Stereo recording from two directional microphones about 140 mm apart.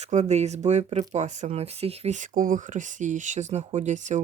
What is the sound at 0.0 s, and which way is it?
Speech, 55° right (ahead or behind).